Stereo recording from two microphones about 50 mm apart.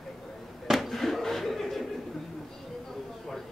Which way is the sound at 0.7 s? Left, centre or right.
Centre.